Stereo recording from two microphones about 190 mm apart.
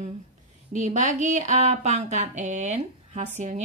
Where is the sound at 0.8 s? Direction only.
40° right (ahead or behind).